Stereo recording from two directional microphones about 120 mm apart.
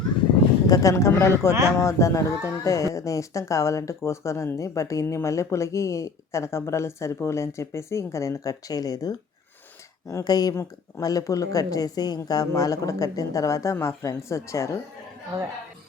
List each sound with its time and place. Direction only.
0.7 s speech: 25° left (ahead or behind)